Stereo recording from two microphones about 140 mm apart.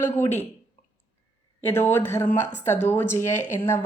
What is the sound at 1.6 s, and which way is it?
Speech, 15° left (ahead or behind).